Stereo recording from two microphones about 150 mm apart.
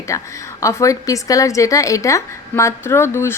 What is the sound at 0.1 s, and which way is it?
A woman's voice, 20° left (ahead or behind).